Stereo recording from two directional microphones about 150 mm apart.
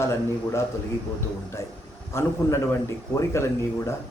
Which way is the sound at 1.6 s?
20° left (ahead or behind).